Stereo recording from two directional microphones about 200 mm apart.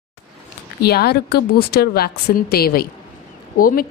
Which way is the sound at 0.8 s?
55° left (ahead or behind).